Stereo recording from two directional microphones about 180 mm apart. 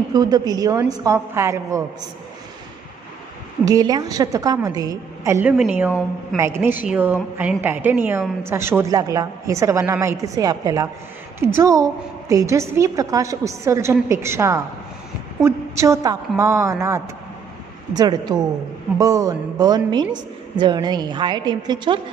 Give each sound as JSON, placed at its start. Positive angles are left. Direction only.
{"t": 0.1, "sound": "a woman's voice", "side_deg": -20}
{"t": 3.6, "sound": "a woman's voice", "side_deg": -20}